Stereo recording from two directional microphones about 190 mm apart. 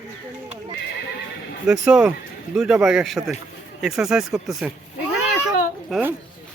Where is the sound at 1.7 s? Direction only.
5° right (ahead or behind).